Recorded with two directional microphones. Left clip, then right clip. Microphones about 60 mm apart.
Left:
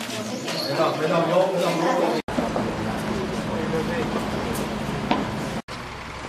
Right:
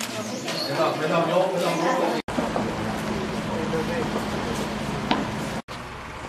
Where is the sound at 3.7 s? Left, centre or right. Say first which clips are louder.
Left 1 dB; centre.